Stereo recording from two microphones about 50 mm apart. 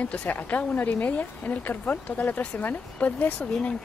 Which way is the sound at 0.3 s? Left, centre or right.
Left.